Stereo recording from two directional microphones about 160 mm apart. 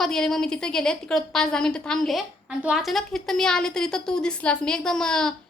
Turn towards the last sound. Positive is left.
turn(degrees=5)  # may be behind; listen again after turning